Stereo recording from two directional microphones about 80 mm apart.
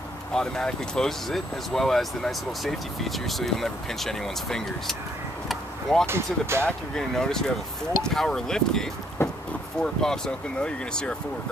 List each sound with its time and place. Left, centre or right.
0.3 s speech: centre
5.5 s vehicle: centre
6.0 s speech: right
7.0 s speech: centre
9.2 s vehicle: left
9.8 s speech: centre